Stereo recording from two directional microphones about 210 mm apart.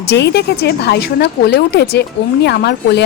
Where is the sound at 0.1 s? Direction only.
55° left (ahead or behind).